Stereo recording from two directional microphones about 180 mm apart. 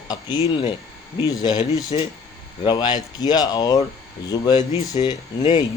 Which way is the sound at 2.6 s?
25° left (ahead or behind).